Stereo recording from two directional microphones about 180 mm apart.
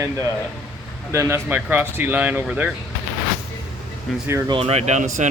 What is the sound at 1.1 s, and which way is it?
Speech, 15° right (ahead or behind).